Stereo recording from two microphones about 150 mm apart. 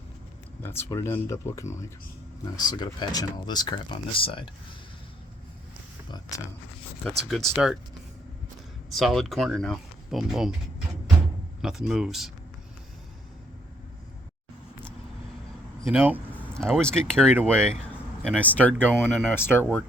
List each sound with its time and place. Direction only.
0.8 s speech: 15° left (ahead or behind); by 4.4 s 35° left (ahead or behind)
6.1 s speech: 25° left (ahead or behind)
7.0 s speech: centre (ahead or behind)
9.0 s speech: centre (ahead or behind)
11.6 s speech: 5° right (ahead or behind)
15.8 s speech: 10° right (ahead or behind)
16.6 s speech: 5° left (ahead or behind)
18.9 s speech: 5° right (ahead or behind)
19.3 s speech: 15° left (ahead or behind)